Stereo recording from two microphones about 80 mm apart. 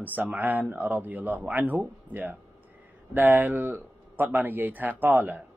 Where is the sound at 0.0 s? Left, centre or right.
Right.